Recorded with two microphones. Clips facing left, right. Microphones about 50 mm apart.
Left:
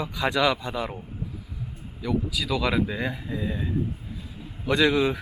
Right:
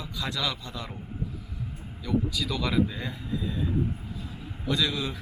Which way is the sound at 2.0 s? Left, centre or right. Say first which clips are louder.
Left 1 dB; centre.